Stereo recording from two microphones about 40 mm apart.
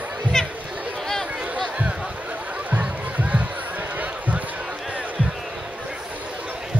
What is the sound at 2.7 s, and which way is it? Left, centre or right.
Music, right.